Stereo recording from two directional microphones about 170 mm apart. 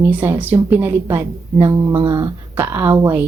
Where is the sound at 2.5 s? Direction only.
15° right (ahead or behind).